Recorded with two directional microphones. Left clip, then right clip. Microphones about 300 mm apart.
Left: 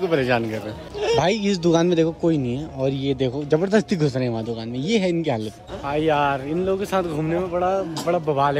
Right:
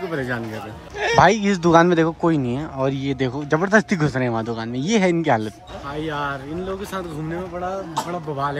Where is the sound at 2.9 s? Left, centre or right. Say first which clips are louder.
Left 1 dB; centre.